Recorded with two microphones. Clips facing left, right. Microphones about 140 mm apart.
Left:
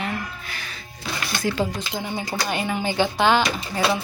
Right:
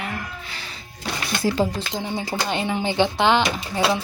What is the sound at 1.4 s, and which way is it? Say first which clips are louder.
Speech: right 3 dB; 30° right (ahead or behind).